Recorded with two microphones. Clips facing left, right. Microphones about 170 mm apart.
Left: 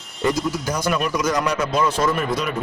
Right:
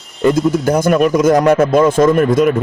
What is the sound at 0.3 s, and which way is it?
A man's voice, 55° right (ahead or behind).